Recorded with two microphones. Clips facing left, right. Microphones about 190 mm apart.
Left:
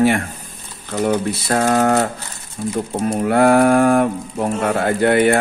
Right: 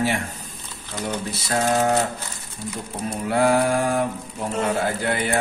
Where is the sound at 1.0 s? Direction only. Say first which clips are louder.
Left 10 dB; 55° left (ahead or behind).